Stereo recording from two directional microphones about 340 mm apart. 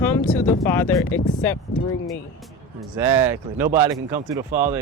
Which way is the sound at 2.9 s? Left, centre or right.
Centre.